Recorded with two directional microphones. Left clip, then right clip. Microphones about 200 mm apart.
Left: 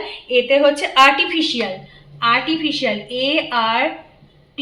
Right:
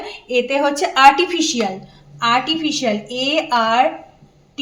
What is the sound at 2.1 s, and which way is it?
A woman's voice, 45° right (ahead or behind).